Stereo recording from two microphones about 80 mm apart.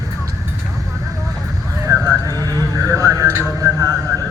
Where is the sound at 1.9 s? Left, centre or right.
Right.